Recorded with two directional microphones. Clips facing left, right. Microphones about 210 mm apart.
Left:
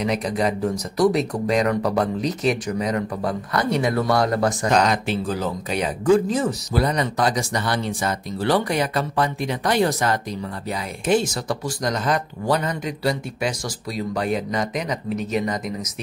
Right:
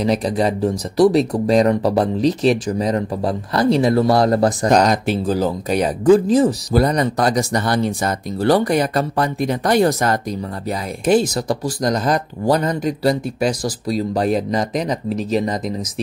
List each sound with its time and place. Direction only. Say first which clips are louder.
0.0 s speech: right 4 dB; 30° right (ahead or behind)